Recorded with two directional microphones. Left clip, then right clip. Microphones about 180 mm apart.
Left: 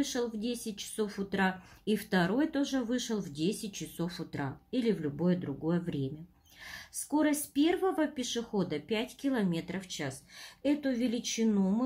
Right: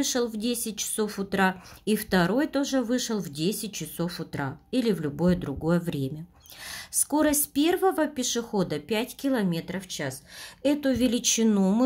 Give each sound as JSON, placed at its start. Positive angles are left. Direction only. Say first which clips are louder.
{"t": 0.0, "sound": "speech", "louder": "right 6 dB", "side_deg": -30}
{"t": 10.6, "sound": "speech", "louder": "right 7 dB", "side_deg": -30}